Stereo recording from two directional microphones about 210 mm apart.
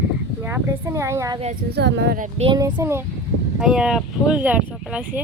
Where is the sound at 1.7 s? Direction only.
55° right (ahead or behind); by 2.5 s 40° right (ahead or behind).